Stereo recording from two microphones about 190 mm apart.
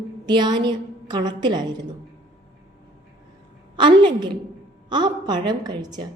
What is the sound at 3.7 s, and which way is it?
A woman's voice, 25° right (ahead or behind).